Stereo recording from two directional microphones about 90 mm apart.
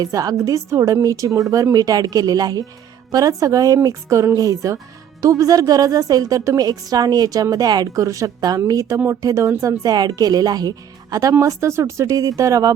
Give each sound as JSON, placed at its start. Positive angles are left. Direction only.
{"t": 0.0, "sound": "speech", "side_deg": -45}